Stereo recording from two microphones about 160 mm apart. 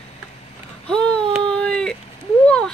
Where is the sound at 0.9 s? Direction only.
5° left (ahead or behind).